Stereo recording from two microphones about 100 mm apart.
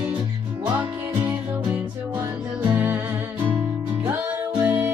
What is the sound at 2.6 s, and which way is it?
Music, 25° right (ahead or behind).